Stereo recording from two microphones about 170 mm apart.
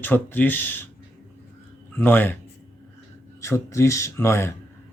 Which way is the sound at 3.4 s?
15° left (ahead or behind).